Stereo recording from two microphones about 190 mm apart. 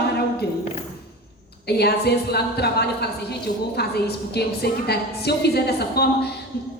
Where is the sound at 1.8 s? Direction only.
60° left (ahead or behind).